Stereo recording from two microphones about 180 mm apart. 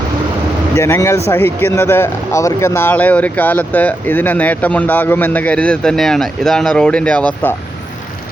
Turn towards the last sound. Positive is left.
turn(degrees=10)  # may be behind; listen again after turning